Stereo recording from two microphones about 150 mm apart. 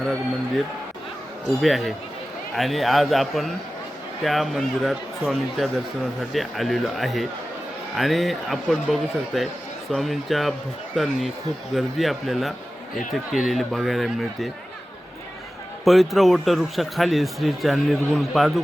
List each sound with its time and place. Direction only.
1.6 s a man's voice: centre (ahead or behind)
15.8 s a man's voice: centre (ahead or behind)